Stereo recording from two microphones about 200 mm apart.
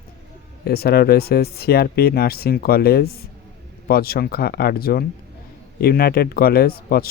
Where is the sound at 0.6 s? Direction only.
50° left (ahead or behind).